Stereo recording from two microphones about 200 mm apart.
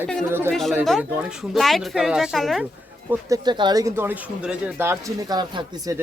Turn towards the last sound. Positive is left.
turn(degrees=-20)  # may be behind; listen again after turning